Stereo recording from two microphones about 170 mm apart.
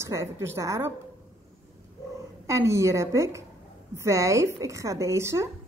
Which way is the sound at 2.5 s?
15° right (ahead or behind).